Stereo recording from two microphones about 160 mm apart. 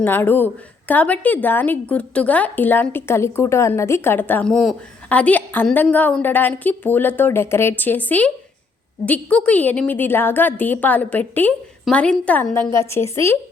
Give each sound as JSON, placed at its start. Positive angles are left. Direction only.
{"t": 0.0, "sound": "a woman's voice", "side_deg": 10}